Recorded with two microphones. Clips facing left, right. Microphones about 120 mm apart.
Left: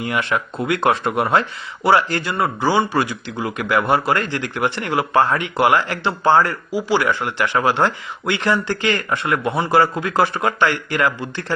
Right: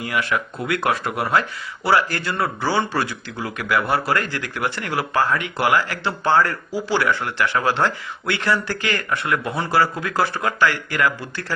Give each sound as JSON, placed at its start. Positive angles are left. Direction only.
{"t": 0.0, "sound": "speech", "side_deg": 25}